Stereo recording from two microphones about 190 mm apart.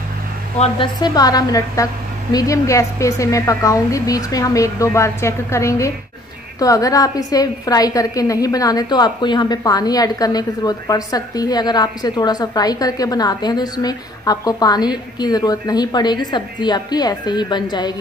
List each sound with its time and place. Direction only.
0.6 s a woman's voice: 25° left (ahead or behind)